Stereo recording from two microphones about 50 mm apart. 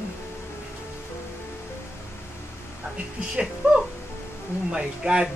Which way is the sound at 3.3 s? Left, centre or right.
Centre.